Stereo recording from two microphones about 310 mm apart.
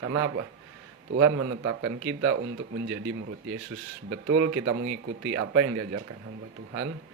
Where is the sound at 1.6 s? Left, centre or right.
Right.